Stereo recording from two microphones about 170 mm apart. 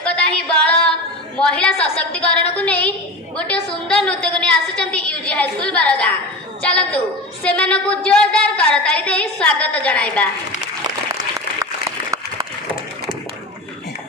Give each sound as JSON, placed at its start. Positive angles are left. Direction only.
{"t": 0.0, "sound": "female singing", "side_deg": 5}
{"t": 1.4, "sound": "a woman's voice", "side_deg": 5}
{"t": 11.3, "sound": "applause", "side_deg": -20}